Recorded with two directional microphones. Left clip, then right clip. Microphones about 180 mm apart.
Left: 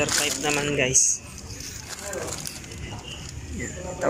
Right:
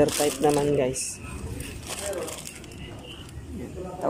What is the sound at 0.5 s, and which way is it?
Speech, 20° right (ahead or behind).